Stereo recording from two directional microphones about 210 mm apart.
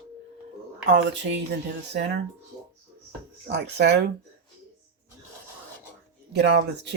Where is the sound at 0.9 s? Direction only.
60° right (ahead or behind).